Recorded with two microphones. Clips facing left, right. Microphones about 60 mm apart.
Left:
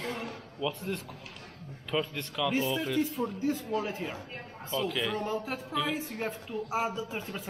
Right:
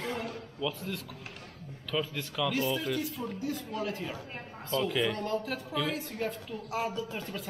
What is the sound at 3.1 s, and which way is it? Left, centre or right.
Speech, left.